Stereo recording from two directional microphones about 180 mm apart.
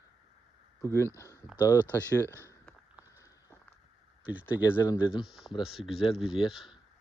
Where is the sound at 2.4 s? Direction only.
15° left (ahead or behind).